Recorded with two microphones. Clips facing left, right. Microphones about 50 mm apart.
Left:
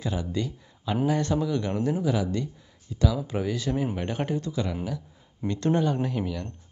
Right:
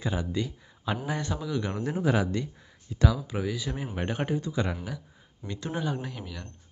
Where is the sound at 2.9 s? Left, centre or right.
Right.